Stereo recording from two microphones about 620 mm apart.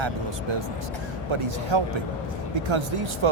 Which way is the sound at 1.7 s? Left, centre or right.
Right.